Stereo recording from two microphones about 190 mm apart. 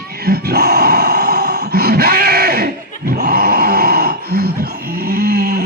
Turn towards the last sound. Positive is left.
turn(degrees=-55)  # may be behind; listen again after turning